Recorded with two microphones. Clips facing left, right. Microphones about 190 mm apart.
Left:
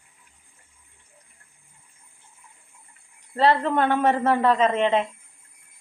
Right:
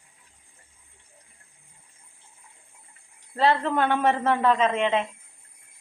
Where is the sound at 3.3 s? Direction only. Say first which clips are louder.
Left 2 dB; centre (ahead or behind).